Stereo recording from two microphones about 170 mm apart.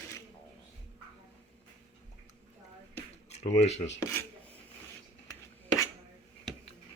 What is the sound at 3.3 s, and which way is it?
Speech, 40° left (ahead or behind).